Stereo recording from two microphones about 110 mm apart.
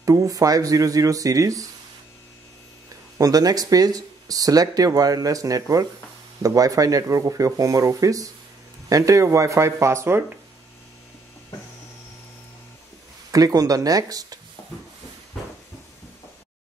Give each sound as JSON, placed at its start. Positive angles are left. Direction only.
{"t": 0.0, "sound": "speech", "side_deg": -30}
{"t": 3.2, "sound": "speech", "side_deg": -35}
{"t": 13.3, "sound": "speech", "side_deg": -35}